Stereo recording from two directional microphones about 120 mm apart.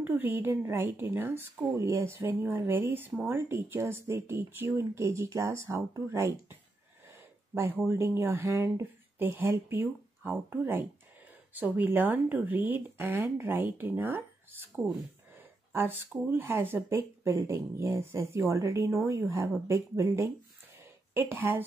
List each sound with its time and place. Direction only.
0.0 s speech: 15° right (ahead or behind)
7.5 s speech: 20° right (ahead or behind)